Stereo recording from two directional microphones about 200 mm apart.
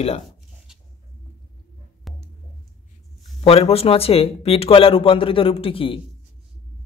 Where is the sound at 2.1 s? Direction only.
Centre (ahead or behind).